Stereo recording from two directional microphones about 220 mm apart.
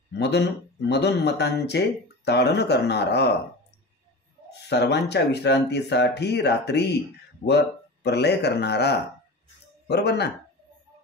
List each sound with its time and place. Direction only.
0.2 s speech: 50° left (ahead or behind)
4.5 s speech: 50° left (ahead or behind)